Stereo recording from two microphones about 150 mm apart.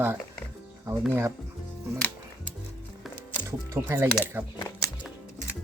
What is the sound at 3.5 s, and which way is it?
Speech, 15° right (ahead or behind).